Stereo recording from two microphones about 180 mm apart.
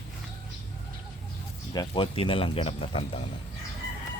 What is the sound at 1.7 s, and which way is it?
Speech, 25° left (ahead or behind).